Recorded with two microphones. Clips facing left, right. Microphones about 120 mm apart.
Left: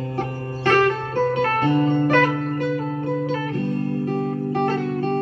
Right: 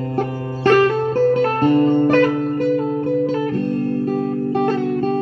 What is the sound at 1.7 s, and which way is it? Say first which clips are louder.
Music: right 5 dB; 45° right (ahead or behind).